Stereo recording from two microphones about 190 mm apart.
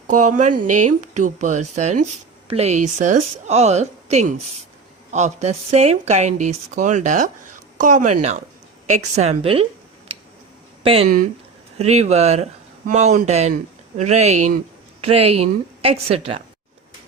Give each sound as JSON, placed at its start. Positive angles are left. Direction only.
{"t": 0.1, "sound": "speech", "side_deg": -40}
{"t": 10.8, "sound": "speech", "side_deg": -30}